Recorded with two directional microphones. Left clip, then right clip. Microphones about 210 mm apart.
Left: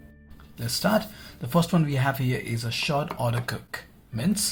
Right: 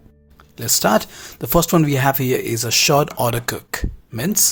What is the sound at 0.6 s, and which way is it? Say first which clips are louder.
Speech: right 8 dB; 50° right (ahead or behind).